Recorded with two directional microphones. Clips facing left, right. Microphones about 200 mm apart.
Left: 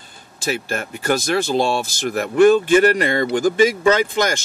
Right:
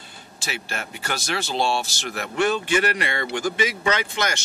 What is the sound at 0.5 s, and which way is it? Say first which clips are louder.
Speech: left 9 dB; 45° left (ahead or behind).